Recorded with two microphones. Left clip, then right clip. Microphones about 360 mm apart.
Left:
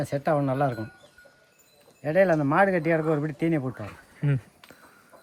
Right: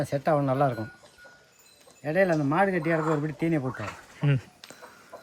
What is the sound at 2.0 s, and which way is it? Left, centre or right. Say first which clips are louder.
A man's voice: left 3 dB; centre.